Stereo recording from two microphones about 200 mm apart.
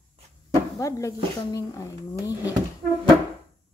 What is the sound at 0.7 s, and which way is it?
Speech, 15° left (ahead or behind).